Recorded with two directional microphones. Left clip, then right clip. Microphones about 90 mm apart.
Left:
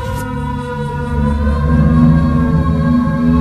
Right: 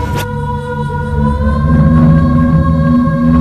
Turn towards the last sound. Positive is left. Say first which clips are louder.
# right 3 dB
turn(degrees=25)  # may be behind; listen again after turning